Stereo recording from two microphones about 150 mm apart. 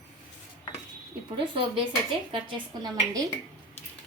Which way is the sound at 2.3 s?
30° right (ahead or behind).